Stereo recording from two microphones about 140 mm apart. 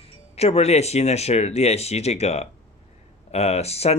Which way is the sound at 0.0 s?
45° left (ahead or behind).